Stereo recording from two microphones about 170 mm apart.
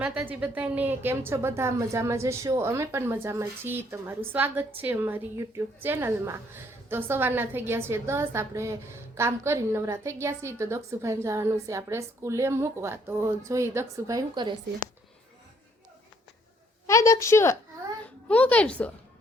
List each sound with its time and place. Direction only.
0.0 s a woman's voice: 10° right (ahead or behind); by 14.5 s 25° right (ahead or behind)
16.8 s a woman's voice: 15° left (ahead or behind)